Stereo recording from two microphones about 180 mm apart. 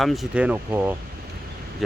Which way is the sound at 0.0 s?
Centre (ahead or behind).